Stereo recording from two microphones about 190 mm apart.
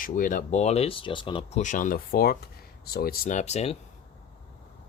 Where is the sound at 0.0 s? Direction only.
45° left (ahead or behind).